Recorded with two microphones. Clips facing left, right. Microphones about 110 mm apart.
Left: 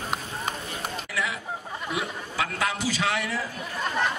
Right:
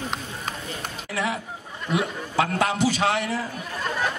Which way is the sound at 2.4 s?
35° right (ahead or behind).